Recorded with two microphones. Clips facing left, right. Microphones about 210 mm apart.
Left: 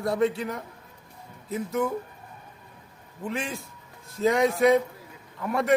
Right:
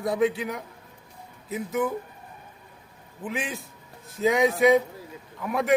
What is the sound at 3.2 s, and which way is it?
A man's voice, centre (ahead or behind).